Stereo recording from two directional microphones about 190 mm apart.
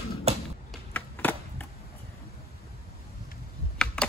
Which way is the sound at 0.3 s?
35° right (ahead or behind).